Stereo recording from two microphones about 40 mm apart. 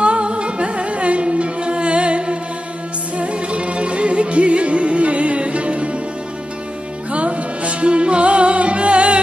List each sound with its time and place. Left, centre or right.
0.0 s music: right
7.1 s music: right